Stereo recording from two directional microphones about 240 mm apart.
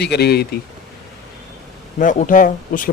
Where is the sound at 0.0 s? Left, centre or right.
Left.